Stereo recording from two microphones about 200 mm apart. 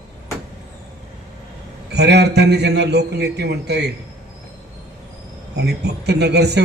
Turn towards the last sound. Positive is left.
turn(degrees=-55)  # may be behind; listen again after turning